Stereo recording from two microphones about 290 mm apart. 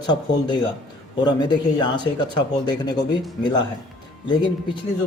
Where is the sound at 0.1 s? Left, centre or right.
Centre.